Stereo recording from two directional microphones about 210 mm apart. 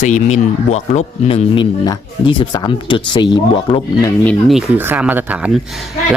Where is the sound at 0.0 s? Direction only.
35° left (ahead or behind).